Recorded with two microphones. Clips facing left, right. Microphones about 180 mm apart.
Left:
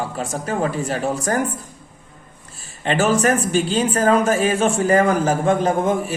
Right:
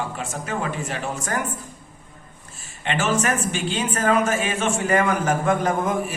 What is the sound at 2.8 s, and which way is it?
A man's voice, 35° left (ahead or behind).